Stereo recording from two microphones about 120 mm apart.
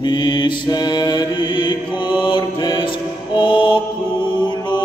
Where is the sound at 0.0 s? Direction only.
40° left (ahead or behind).